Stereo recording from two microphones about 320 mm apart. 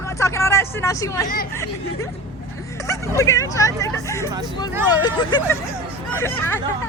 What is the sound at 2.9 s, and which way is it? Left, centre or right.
Speech, centre.